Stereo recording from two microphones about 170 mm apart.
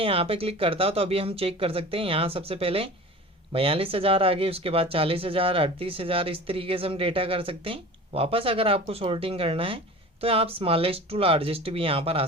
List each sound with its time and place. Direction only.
0.0 s speech: 35° right (ahead or behind)